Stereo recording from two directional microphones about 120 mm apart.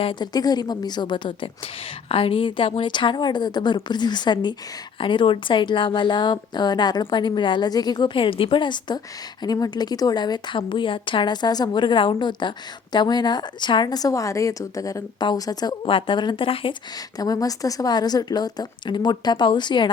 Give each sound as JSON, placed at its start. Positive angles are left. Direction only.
{"t": 0.0, "sound": "speech", "side_deg": 45}
{"t": 0.3, "sound": "a woman's voice", "side_deg": 35}
{"t": 17.2, "sound": "a woman's voice", "side_deg": 30}